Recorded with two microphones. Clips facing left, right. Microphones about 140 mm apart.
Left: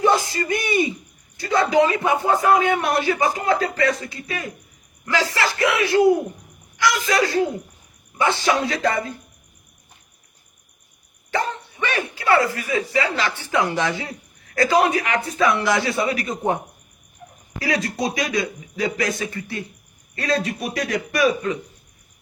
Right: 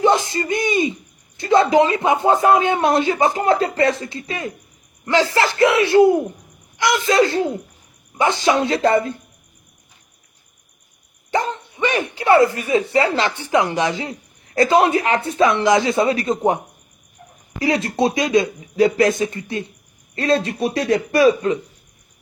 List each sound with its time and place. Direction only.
0.0 s a sound: 20° right (ahead or behind)
1.4 s speech: 25° right (ahead or behind)
11.8 s speech: 20° right (ahead or behind)
17.6 s speech: 25° right (ahead or behind)